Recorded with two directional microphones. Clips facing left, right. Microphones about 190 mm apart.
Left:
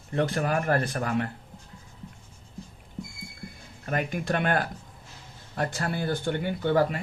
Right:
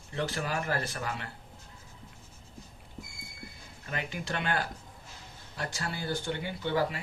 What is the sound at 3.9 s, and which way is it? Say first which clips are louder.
Speech: left 8 dB; 50° left (ahead or behind).